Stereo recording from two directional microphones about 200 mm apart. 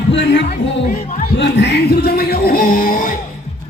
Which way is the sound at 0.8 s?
40° left (ahead or behind).